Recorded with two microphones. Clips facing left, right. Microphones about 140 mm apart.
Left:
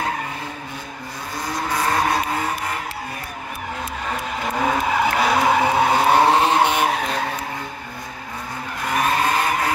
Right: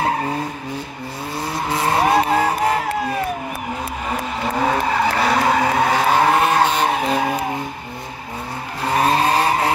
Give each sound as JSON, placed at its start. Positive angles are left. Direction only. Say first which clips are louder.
{"t": 1.7, "sound": "vehicle", "louder": "right 4 dB", "side_deg": -25}
{"t": 4.8, "sound": "skidding", "louder": "right 1 dB", "side_deg": 0}
{"t": 6.2, "sound": "vehicle", "louder": "even", "side_deg": 25}
{"t": 6.9, "sound": "skidding", "louder": "right 4 dB", "side_deg": -5}
{"t": 8.8, "sound": "vehicle", "louder": "right 4 dB", "side_deg": -30}